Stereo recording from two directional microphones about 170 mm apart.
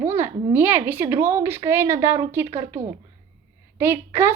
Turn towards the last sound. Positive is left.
turn(degrees=-15)  # may be behind; listen again after turning